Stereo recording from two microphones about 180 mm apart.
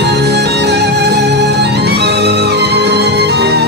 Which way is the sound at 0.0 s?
70° right (ahead or behind).